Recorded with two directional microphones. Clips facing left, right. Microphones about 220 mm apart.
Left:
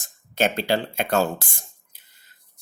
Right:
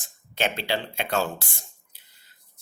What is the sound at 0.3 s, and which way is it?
Speech, 45° left (ahead or behind).